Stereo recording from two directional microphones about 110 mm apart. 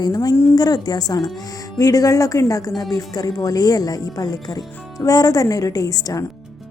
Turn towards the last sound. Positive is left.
turn(degrees=35)  # may be behind; listen again after turning